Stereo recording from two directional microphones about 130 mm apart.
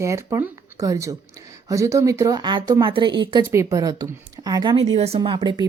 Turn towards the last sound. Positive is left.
turn(degrees=-35)  # may be behind; listen again after turning